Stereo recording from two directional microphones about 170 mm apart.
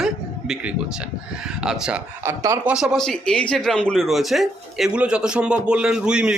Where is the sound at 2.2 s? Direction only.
20° right (ahead or behind).